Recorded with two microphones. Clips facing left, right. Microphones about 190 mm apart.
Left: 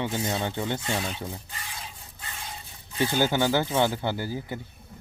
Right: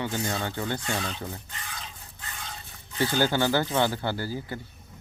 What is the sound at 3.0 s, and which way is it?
Speech, 15° left (ahead or behind).